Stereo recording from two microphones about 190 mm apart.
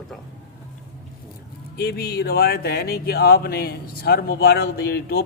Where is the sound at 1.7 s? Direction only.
55° left (ahead or behind).